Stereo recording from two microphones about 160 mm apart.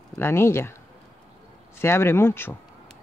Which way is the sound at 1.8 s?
15° left (ahead or behind).